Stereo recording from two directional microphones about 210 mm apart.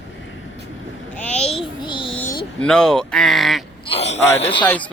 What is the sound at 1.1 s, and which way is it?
Babbling, 5° left (ahead or behind).